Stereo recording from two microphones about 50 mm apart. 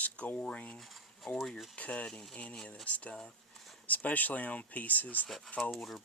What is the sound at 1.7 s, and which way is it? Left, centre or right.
Speech, left.